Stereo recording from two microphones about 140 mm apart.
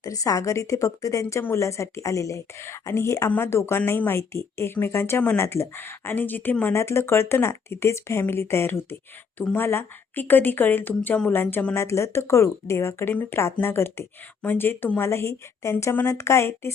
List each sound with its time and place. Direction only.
0.0 s a woman's voice: 25° left (ahead or behind)